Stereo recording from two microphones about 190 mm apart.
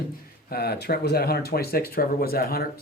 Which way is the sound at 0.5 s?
55° left (ahead or behind).